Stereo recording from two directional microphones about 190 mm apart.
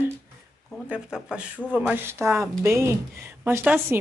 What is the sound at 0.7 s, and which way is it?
Speech, 5° right (ahead or behind).